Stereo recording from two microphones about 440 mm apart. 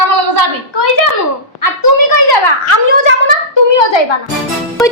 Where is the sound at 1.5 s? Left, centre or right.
Left.